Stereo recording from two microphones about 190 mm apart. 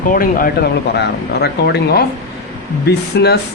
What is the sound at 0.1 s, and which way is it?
Speech, 50° left (ahead or behind).